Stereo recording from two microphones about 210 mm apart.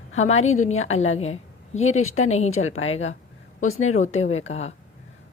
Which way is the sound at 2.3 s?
30° left (ahead or behind).